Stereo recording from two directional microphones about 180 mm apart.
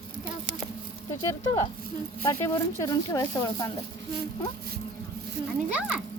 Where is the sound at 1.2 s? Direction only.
20° left (ahead or behind).